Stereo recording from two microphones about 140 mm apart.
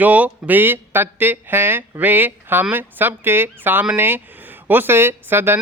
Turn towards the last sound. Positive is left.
turn(degrees=-15)  # may be behind; listen again after turning